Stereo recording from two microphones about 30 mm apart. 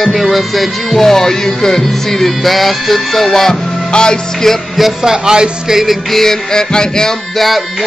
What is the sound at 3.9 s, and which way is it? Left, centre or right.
Music, left.